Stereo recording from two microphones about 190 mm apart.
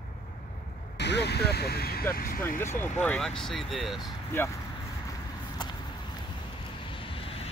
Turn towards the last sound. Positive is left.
turn(degrees=30)  # may be behind; listen again after turning